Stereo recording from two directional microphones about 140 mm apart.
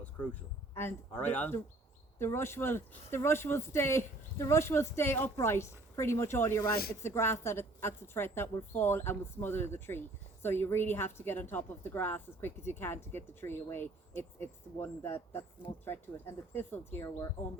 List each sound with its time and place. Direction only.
0.7 s speech: 15° left (ahead or behind)